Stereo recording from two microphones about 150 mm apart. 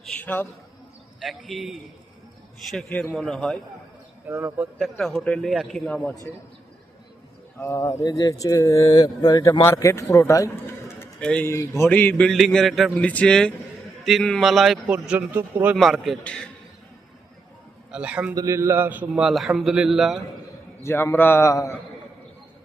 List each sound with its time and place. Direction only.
0.1 s a man's voice: 10° left (ahead or behind)
1.2 s a man's voice: centre (ahead or behind)
4.3 s a man's voice: 15° right (ahead or behind)
4.8 s a man's voice: 5° left (ahead or behind)
7.6 s speech: 20° left (ahead or behind)
11.2 s a man's voice: 5° left (ahead or behind)
11.4 s a man's voice: 20° left (ahead or behind)
17.9 s a man's voice: 10° right (ahead or behind)
18.3 s a man's voice: 20° right (ahead or behind); by 20.1 s centre (ahead or behind)
20.8 s a man's voice: 15° left (ahead or behind)